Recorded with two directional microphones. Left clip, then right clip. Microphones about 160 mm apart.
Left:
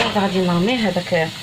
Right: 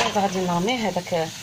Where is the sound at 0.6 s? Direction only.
Centre (ahead or behind).